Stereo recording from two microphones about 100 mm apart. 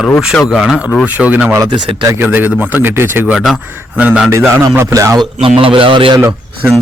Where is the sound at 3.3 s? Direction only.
5° right (ahead or behind).